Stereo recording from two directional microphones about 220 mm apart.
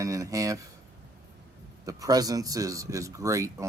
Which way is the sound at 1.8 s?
15° right (ahead or behind).